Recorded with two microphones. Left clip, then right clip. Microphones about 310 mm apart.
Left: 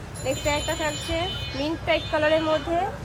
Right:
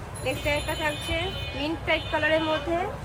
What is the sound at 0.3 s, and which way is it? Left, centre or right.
Speech, left.